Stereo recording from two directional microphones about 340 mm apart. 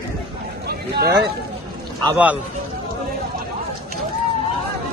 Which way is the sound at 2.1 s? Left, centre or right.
Centre.